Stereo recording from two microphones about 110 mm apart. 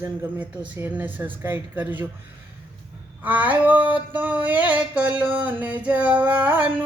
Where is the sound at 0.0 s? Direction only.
15° right (ahead or behind).